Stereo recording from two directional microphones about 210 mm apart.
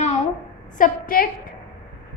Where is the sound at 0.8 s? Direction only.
40° left (ahead or behind).